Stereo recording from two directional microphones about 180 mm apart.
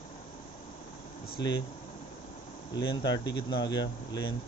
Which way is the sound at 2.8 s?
25° left (ahead or behind).